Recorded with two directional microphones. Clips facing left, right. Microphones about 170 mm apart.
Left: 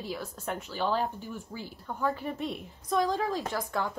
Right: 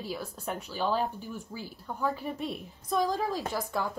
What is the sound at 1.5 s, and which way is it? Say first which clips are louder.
A woman's voice: left 1 dB; 10° right (ahead or behind).